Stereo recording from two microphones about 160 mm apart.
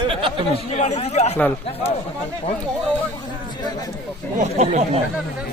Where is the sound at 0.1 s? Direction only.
30° right (ahead or behind).